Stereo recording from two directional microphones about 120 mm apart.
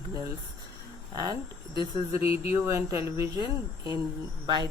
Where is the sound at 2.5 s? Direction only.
20° right (ahead or behind).